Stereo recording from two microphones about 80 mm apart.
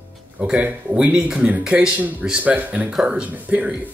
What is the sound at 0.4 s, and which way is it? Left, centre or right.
Speech, centre.